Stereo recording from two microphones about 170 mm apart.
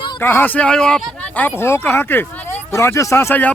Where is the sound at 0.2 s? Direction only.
10° left (ahead or behind).